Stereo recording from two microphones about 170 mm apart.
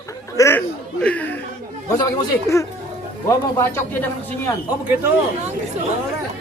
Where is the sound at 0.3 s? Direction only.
15° left (ahead or behind).